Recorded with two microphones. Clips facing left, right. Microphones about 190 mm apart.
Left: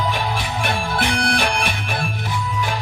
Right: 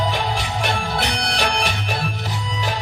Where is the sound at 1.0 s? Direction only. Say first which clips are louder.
Left 2 dB; 50° left (ahead or behind).